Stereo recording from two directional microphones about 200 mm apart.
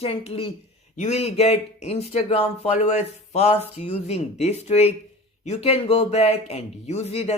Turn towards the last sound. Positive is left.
turn(degrees=30)  # may be behind; listen again after turning